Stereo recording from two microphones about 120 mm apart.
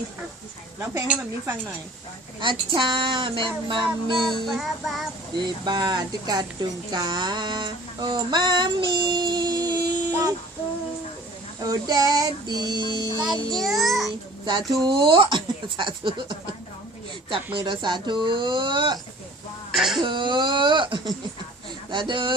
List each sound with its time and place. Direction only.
1.0 s speech: 15° right (ahead or behind)
2.4 s speech: 40° right (ahead or behind)
4.2 s child singing: centre (ahead or behind)
5.4 s speech: 35° right (ahead or behind)
11.6 s speech: 30° right (ahead or behind)
13.5 s child singing: centre (ahead or behind)
14.7 s speech: 40° right (ahead or behind)
17.6 s speech: 40° right (ahead or behind)
19.7 s child singing: 5° right (ahead or behind)
20.0 s speech: 40° right (ahead or behind)